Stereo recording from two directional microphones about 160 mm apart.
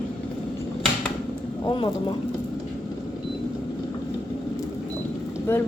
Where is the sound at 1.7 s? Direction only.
30° left (ahead or behind).